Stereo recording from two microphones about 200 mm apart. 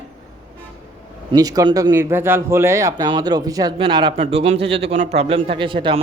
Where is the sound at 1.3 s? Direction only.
20° right (ahead or behind).